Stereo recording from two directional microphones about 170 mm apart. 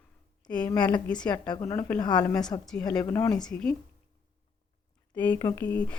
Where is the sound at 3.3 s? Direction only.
5° left (ahead or behind).